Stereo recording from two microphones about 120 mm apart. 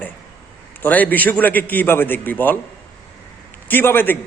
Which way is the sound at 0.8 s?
15° left (ahead or behind).